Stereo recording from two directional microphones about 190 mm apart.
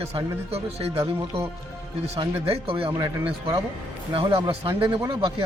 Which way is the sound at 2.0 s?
35° right (ahead or behind).